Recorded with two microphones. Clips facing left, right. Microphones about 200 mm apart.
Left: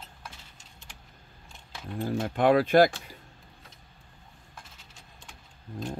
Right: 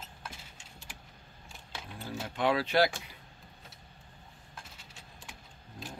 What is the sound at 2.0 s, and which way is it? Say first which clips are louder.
Speech: left 7 dB; 55° left (ahead or behind).